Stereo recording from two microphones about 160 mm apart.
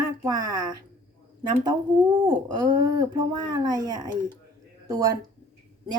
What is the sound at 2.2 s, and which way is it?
Speech, 25° right (ahead or behind).